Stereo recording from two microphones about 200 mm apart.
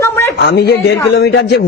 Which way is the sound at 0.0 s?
15° left (ahead or behind).